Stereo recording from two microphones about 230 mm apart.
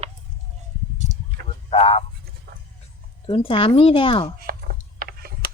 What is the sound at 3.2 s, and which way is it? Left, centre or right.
A woman's voice, left.